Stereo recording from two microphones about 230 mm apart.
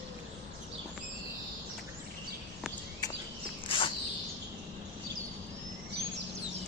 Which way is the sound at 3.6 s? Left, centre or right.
Left.